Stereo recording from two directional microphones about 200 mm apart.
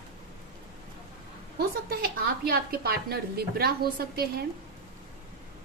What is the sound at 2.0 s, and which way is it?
A woman's voice, 50° right (ahead or behind).